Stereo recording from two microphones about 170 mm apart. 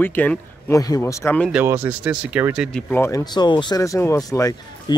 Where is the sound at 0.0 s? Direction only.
10° left (ahead or behind).